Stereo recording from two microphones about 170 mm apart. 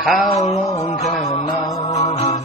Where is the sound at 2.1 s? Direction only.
40° left (ahead or behind).